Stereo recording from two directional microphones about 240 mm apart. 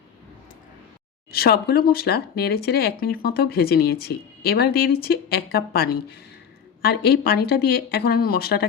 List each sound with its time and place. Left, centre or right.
1.3 s speech: left